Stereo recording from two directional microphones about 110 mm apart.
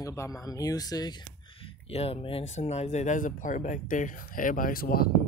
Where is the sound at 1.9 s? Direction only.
65° left (ahead or behind); by 3.2 s 90° left.